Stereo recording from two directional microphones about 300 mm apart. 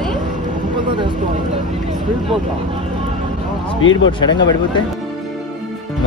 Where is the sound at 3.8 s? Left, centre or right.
Left.